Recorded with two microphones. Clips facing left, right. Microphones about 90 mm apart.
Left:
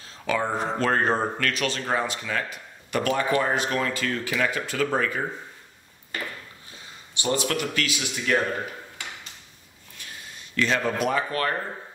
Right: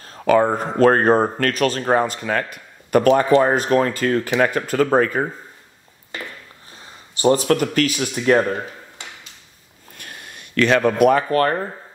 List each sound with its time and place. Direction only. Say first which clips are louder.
0.0 s speech: right 11 dB; 50° right (ahead or behind)
7.2 s speech: right 10 dB; 40° right (ahead or behind)
9.9 s a sound: right 4 dB; 55° right (ahead or behind)